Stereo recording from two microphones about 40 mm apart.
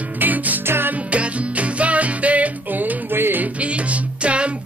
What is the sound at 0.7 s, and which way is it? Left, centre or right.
Music, right.